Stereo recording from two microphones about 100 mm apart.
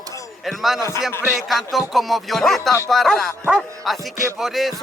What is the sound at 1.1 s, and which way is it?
Speech, 30° left (ahead or behind).